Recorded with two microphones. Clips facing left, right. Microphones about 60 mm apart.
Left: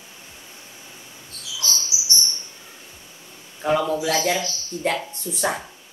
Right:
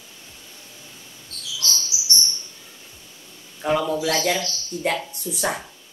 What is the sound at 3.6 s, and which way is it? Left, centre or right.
A man's voice, centre.